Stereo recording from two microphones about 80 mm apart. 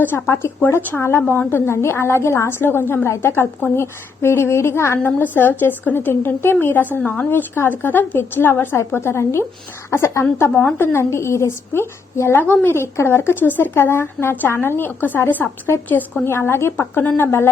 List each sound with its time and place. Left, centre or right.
0.0 s a woman's voice: left